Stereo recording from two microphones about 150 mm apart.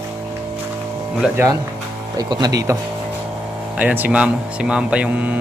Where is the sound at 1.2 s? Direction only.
15° right (ahead or behind).